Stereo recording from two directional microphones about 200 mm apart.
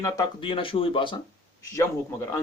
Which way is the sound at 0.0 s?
20° left (ahead or behind).